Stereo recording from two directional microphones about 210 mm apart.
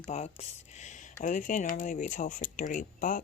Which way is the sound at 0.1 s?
30° left (ahead or behind).